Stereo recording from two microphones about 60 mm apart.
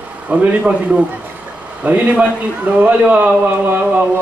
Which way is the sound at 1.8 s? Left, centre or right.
Right.